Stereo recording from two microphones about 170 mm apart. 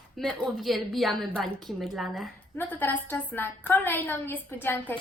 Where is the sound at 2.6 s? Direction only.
10° left (ahead or behind).